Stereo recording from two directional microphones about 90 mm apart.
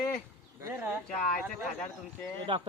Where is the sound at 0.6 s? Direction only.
25° right (ahead or behind).